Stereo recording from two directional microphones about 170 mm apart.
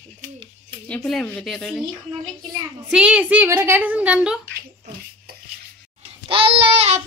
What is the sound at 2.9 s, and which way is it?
A woman's voice, 5° right (ahead or behind).